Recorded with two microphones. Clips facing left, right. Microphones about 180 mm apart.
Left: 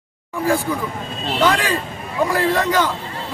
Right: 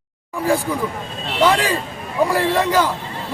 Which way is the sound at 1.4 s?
10° right (ahead or behind).